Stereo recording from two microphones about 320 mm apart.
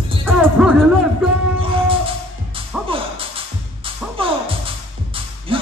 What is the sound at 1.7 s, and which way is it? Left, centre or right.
Music, centre.